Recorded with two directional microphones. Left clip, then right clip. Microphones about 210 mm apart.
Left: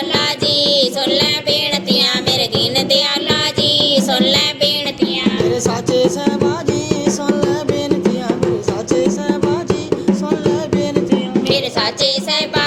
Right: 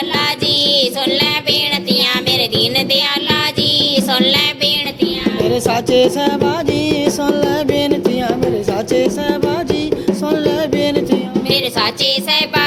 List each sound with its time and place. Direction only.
0.4 s music: 45° right (ahead or behind)
11.5 s music: 45° right (ahead or behind)